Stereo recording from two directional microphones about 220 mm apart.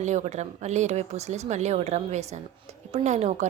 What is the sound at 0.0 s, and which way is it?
A woman's voice, 30° right (ahead or behind).